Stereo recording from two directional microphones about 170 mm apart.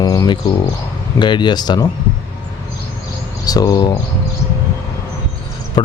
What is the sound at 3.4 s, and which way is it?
Speech, 25° left (ahead or behind).